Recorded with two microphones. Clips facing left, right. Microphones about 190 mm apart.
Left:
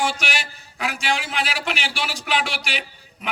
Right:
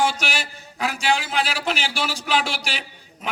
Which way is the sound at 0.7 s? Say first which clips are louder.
Right 3 dB; 35° right (ahead or behind).